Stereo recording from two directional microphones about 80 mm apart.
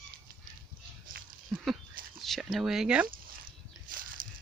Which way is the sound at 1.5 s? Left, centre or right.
Centre.